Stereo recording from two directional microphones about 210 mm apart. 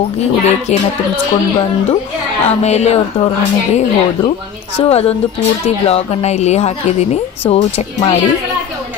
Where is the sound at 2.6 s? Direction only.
30° left (ahead or behind).